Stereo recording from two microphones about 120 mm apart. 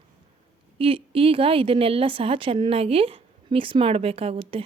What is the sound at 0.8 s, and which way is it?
A woman's voice, 50° right (ahead or behind).